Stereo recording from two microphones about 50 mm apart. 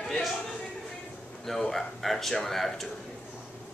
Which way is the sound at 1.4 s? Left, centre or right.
Centre.